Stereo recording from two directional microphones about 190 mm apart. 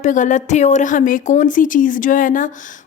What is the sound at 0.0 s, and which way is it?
Speech, 40° left (ahead or behind).